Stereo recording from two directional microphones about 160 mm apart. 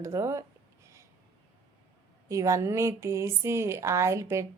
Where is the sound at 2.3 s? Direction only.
20° right (ahead or behind).